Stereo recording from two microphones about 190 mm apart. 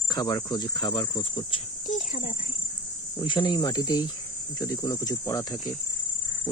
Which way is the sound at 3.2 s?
20° left (ahead or behind).